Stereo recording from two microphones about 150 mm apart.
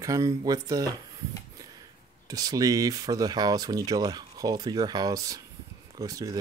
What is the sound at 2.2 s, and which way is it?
Speech, 25° right (ahead or behind).